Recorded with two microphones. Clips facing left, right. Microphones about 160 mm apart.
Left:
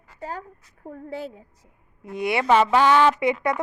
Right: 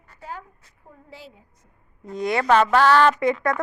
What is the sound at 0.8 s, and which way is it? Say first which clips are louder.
Speech: left 12 dB; 55° left (ahead or behind).